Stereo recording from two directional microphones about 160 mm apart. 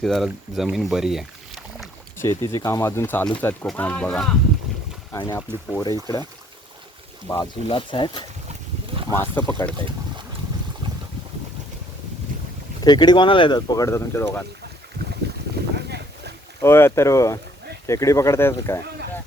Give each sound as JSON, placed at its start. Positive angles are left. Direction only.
{"t": 0.0, "sound": "speech", "side_deg": 0}
{"t": 2.1, "sound": "speech", "side_deg": 15}
{"t": 5.1, "sound": "speech", "side_deg": 25}
{"t": 5.4, "sound": "speech", "side_deg": 15}
{"t": 7.3, "sound": "speech", "side_deg": 20}
{"t": 7.7, "sound": "speech", "side_deg": 30}
{"t": 9.1, "sound": "speech", "side_deg": 15}
{"t": 12.8, "sound": "speech", "side_deg": 25}
{"t": 15.7, "sound": "a sound", "side_deg": -90}
{"t": 16.6, "sound": "speech", "side_deg": 15}